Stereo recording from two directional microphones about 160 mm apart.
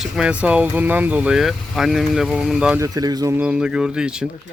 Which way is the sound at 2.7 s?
20° right (ahead or behind).